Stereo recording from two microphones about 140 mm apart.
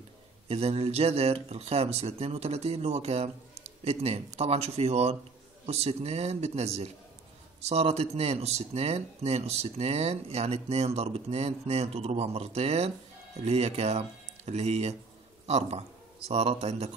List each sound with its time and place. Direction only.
0.5 s a man's voice: 45° right (ahead or behind)